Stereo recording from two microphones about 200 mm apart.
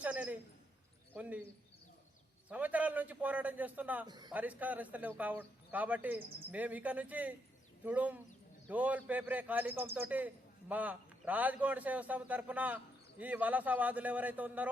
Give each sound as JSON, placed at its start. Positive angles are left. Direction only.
{"t": 0.0, "sound": "a man's voice", "side_deg": -5}
{"t": 2.5, "sound": "speech", "side_deg": -10}
{"t": 4.0, "sound": "a man's voice", "side_deg": -20}
{"t": 4.3, "sound": "speech", "side_deg": -10}